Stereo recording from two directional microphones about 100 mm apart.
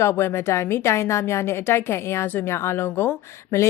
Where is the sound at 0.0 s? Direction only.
25° left (ahead or behind).